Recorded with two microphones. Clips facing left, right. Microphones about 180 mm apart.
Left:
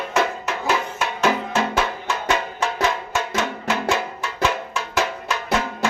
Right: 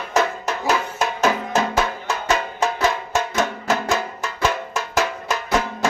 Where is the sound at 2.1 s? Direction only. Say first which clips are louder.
Right 1 dB; 40° right (ahead or behind).